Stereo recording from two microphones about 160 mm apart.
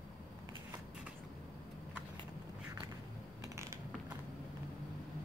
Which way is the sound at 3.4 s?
20° right (ahead or behind).